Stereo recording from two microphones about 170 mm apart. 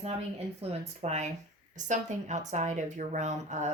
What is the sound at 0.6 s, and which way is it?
A woman's voice, 40° right (ahead or behind).